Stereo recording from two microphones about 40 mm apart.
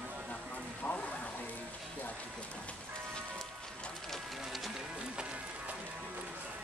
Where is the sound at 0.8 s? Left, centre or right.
Left.